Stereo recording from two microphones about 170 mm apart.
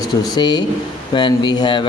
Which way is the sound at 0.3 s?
25° left (ahead or behind).